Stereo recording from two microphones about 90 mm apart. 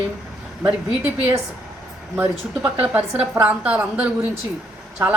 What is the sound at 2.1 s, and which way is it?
A woman's voice, 20° right (ahead or behind).